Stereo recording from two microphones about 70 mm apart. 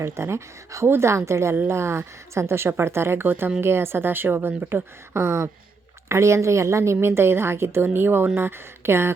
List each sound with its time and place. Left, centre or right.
0.0 s speech: right